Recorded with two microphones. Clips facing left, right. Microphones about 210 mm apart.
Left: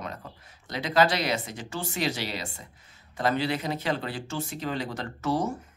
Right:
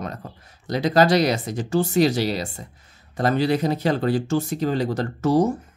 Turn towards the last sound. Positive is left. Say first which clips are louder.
# right 9 dB
turn(degrees=-40)  # may be behind; listen again after turning